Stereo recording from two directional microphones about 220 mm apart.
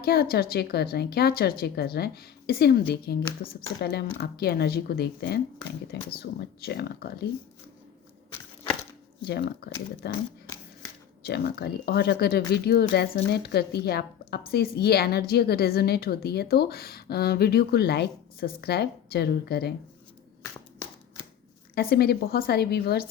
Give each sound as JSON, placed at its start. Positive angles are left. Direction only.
{"t": 0.0, "sound": "speech", "side_deg": 45}
{"t": 9.2, "sound": "speech", "side_deg": 45}
{"t": 21.8, "sound": "speech", "side_deg": 45}